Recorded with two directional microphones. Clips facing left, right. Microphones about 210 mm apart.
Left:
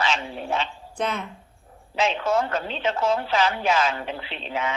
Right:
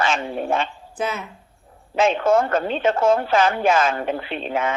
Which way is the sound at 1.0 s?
5° right (ahead or behind).